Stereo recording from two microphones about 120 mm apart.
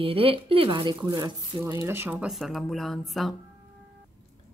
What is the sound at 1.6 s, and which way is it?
Speech, 25° right (ahead or behind).